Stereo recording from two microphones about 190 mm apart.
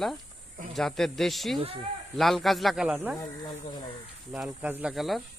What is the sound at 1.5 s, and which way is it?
Speech, 30° right (ahead or behind).